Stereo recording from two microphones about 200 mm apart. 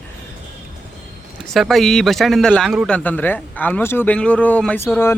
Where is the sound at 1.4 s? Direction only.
Centre (ahead or behind).